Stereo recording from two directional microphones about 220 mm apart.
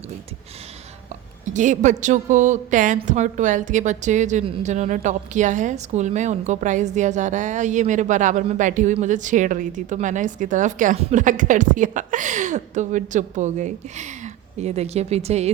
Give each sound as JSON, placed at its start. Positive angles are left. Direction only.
{"t": 1.5, "sound": "a woman's voice", "side_deg": -35}